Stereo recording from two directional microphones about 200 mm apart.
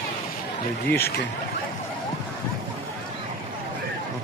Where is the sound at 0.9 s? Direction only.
10° left (ahead or behind).